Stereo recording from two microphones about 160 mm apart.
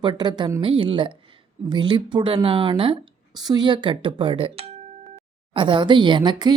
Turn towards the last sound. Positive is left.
turn(degrees=-25)  # may be behind; listen again after turning